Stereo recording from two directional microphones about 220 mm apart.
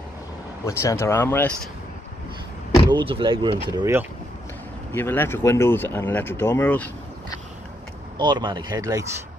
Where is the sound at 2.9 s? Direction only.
20° right (ahead or behind).